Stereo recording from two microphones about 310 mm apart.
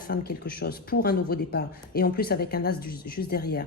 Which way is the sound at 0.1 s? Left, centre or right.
Left.